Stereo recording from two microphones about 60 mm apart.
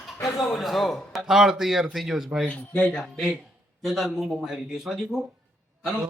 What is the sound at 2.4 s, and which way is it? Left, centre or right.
Speech, left.